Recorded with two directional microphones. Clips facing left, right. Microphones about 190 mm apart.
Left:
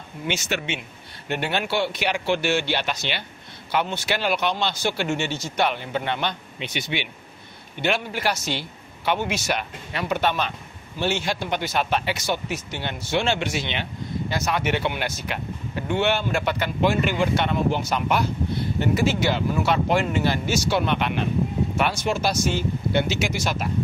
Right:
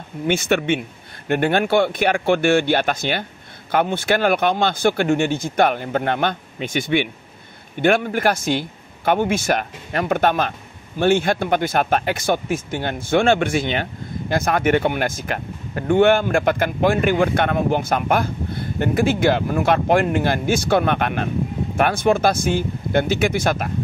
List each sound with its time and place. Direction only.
0.3 s speech: 55° right (ahead or behind)